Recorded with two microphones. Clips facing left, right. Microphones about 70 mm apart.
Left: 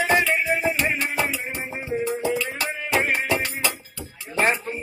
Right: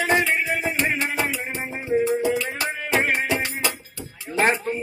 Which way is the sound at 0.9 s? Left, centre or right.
Right.